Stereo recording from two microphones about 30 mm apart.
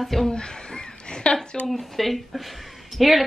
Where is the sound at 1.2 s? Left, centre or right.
Left.